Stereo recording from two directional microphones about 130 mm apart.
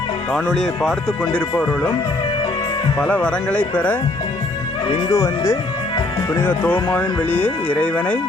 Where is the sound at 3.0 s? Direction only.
10° left (ahead or behind).